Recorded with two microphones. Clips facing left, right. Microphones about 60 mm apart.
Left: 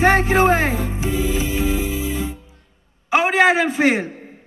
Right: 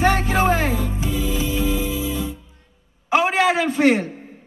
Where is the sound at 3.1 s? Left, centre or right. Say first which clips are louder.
Left 2 dB; left.